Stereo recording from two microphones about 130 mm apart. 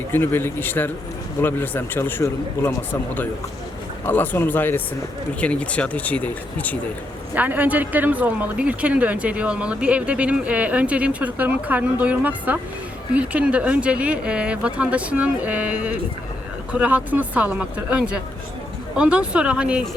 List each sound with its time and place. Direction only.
0.1 s speech: 15° left (ahead or behind)
4.0 s speech: 15° left (ahead or behind)
7.3 s speech: 10° right (ahead or behind)